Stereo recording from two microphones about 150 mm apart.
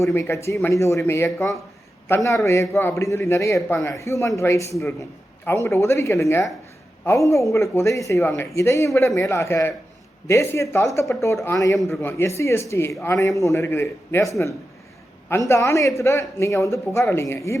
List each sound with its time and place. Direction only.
0.0 s speech: 20° left (ahead or behind)